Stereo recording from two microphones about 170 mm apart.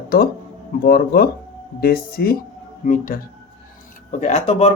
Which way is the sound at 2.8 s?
50° left (ahead or behind).